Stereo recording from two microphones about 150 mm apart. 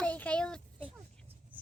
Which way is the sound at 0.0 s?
10° left (ahead or behind).